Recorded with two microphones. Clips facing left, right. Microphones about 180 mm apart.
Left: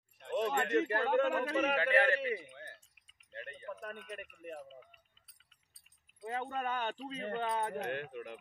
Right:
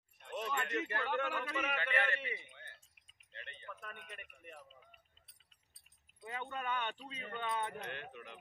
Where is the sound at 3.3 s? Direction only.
45° left (ahead or behind).